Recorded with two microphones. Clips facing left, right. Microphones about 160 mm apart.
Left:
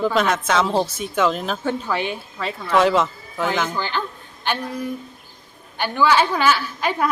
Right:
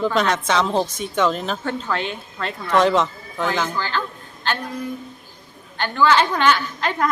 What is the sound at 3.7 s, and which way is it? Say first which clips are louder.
Speech: even; 15° left (ahead or behind).